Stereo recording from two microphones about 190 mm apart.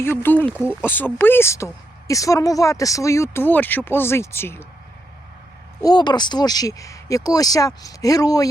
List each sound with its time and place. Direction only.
0.2 s a woman's voice: 10° left (ahead or behind)
5.8 s speech: 25° left (ahead or behind)